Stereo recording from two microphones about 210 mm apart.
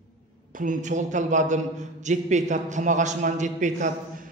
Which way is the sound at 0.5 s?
35° right (ahead or behind).